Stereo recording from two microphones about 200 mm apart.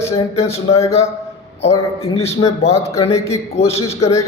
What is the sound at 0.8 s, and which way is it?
Speech, 15° left (ahead or behind).